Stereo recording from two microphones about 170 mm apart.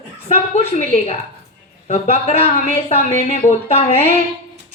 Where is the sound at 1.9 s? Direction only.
35° left (ahead or behind).